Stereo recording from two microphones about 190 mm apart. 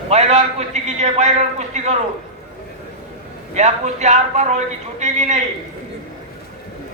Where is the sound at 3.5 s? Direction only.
35° right (ahead or behind).